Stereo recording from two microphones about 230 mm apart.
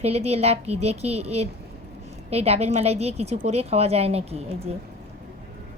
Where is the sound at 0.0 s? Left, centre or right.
Right.